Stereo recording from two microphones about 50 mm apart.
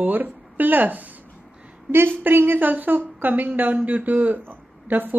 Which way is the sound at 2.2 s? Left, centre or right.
Right.